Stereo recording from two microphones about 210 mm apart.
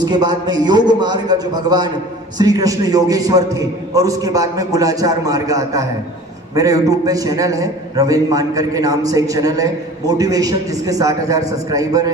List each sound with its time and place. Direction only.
0.0 s a man's voice: 20° right (ahead or behind)